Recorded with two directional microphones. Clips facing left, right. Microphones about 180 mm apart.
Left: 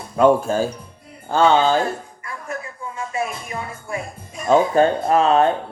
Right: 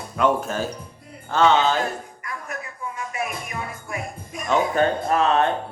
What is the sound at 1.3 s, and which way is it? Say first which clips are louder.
Music: left 3 dB; 30° left (ahead or behind).